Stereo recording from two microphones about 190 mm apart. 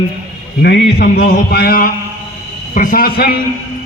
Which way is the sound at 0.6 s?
60° left (ahead or behind).